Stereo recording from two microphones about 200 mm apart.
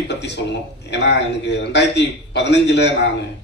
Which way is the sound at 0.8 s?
60° left (ahead or behind).